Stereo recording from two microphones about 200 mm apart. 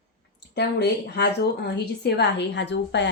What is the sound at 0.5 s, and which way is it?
Speech, 55° left (ahead or behind).